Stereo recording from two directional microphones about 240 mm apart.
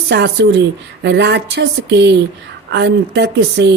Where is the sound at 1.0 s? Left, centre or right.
Right.